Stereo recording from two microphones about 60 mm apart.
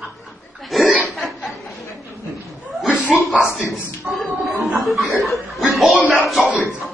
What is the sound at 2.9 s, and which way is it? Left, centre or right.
Chuckle, centre.